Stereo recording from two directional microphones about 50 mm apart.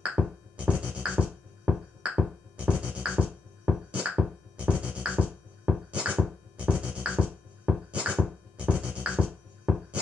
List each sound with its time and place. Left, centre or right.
0.2 s music: centre
0.6 s music: right